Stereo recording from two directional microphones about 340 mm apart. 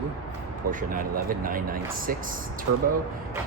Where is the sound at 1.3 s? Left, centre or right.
Right.